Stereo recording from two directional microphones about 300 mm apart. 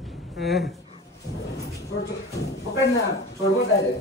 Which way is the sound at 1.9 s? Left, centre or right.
Left.